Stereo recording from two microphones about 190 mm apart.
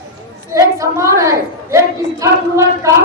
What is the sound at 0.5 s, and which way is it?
A woman's voice, 15° right (ahead or behind).